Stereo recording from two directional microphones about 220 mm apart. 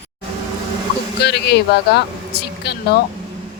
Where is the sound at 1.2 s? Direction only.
50° left (ahead or behind).